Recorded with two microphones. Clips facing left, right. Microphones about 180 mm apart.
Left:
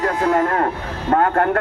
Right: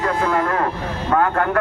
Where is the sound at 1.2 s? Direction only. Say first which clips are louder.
Left 2 dB; 50° left (ahead or behind).